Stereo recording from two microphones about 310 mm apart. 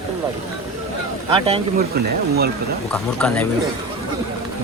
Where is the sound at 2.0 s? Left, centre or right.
Right.